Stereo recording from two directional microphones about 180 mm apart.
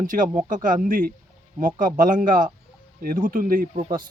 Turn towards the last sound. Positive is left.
turn(degrees=-45)  # may be behind; listen again after turning